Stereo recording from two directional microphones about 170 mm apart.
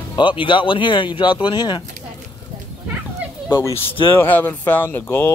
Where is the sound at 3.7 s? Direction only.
30° left (ahead or behind).